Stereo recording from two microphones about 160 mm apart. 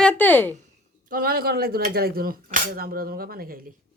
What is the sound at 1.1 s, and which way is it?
Speech, 65° right (ahead or behind).